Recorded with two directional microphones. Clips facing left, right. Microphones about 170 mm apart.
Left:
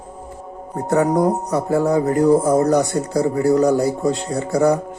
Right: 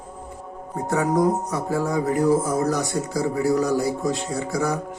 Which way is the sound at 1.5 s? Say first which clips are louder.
Left 6 dB; 65° left (ahead or behind).